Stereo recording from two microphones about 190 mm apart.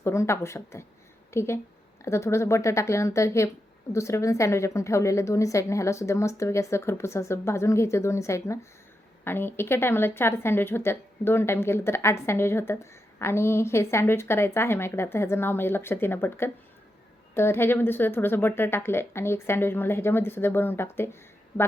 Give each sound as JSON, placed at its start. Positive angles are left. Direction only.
{"t": 0.0, "sound": "speech", "side_deg": 15}